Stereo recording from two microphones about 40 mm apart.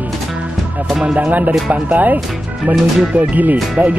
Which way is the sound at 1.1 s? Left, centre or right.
Right.